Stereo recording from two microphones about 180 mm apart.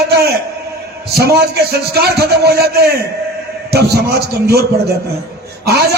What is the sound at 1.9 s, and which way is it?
Speech, 60° right (ahead or behind).